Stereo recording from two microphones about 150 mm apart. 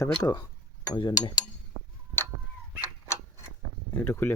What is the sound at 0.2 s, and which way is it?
Speech, 25° left (ahead or behind).